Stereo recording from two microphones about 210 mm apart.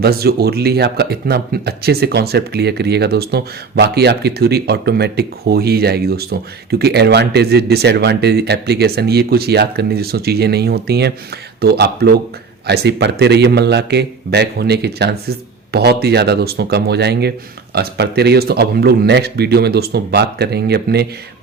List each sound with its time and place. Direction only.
0.0 s speech: 50° right (ahead or behind)